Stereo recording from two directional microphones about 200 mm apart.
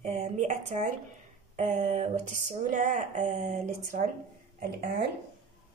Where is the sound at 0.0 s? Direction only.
35° right (ahead or behind).